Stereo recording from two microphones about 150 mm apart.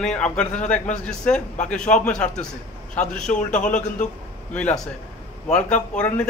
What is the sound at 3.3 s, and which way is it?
Speech, 55° left (ahead or behind).